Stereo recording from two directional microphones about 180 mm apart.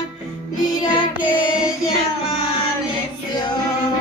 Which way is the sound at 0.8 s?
25° left (ahead or behind).